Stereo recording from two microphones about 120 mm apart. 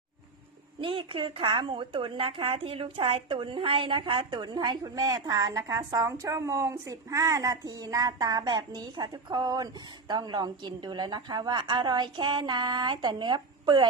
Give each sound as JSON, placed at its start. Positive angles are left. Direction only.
{"t": 0.8, "sound": "a woman's voice", "side_deg": -45}